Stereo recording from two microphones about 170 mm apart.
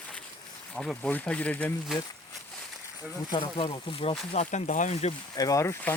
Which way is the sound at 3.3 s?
30° left (ahead or behind).